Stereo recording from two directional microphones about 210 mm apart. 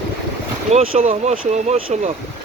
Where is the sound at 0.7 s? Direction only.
30° right (ahead or behind).